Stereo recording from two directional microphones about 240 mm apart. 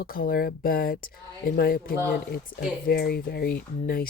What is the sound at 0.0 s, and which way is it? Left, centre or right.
Speech, left.